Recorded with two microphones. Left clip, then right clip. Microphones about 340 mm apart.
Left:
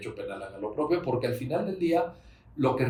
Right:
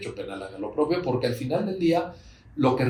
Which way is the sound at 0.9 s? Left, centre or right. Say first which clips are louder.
Right 2 dB; centre.